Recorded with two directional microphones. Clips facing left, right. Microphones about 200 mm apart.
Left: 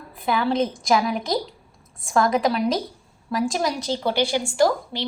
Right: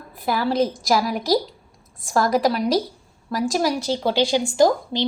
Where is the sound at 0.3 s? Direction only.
Centre (ahead or behind).